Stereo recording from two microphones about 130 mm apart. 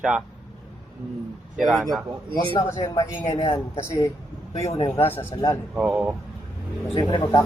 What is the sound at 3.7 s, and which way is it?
A man's voice, 20° left (ahead or behind).